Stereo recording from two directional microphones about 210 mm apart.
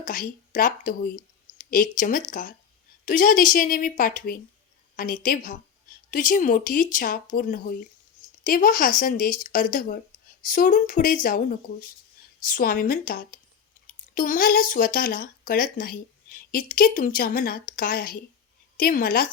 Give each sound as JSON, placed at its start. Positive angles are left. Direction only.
{"t": 0.0, "sound": "speech", "side_deg": 40}